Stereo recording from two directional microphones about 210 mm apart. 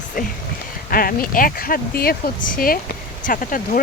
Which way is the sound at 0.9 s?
45° left (ahead or behind).